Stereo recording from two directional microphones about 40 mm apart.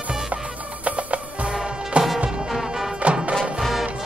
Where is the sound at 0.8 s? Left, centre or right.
Right.